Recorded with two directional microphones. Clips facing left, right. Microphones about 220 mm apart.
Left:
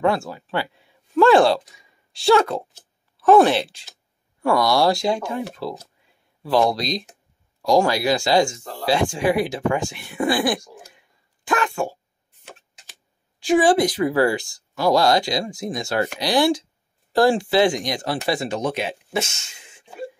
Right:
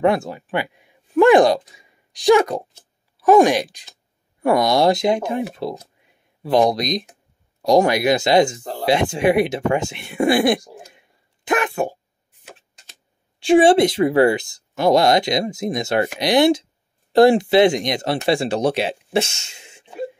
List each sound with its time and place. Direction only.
0.0 s speech: 20° right (ahead or behind)
13.4 s speech: 25° right (ahead or behind)